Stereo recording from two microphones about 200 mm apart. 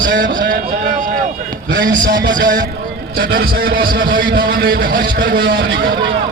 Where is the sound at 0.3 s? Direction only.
45° right (ahead or behind).